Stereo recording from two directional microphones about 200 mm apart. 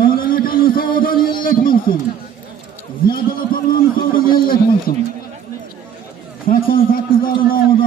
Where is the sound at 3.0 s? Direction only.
45° left (ahead or behind).